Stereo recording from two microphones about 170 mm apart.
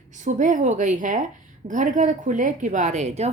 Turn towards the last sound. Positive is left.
turn(degrees=-40)  # may be behind; listen again after turning